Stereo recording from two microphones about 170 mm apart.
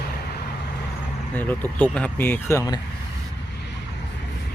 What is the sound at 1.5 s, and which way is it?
Speech, 10° left (ahead or behind).